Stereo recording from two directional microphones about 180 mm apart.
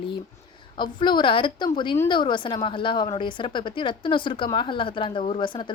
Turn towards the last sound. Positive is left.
turn(degrees=25)  # may be behind; listen again after turning